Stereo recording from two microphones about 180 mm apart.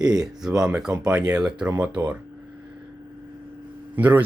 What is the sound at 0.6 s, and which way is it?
Speech, 5° right (ahead or behind).